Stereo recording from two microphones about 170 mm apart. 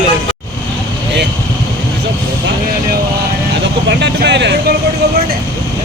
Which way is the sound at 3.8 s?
90° right.